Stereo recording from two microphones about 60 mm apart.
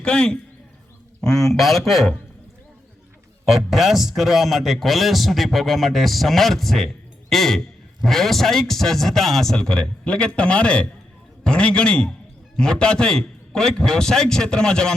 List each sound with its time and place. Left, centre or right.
0.0 s a man's voice: centre
3.5 s a man's voice: centre